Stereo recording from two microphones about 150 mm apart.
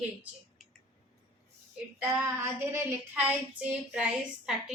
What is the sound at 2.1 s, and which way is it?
A woman's voice, 15° right (ahead or behind).